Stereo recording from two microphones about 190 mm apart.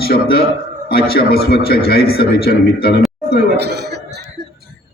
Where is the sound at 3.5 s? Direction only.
60° right (ahead or behind).